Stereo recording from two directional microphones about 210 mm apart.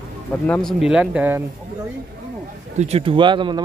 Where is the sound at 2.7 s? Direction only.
30° right (ahead or behind).